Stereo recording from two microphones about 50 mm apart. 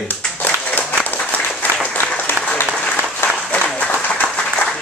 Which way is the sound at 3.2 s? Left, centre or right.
Left.